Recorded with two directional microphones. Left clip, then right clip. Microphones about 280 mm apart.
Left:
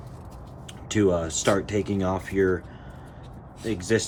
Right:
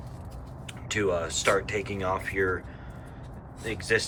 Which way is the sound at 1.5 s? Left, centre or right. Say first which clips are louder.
Left 2 dB; centre.